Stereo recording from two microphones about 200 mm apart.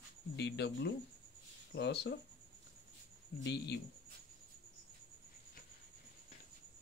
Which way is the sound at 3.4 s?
55° left (ahead or behind).